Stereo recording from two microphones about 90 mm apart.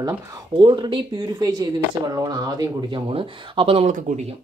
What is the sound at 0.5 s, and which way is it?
Speech, 55° right (ahead or behind).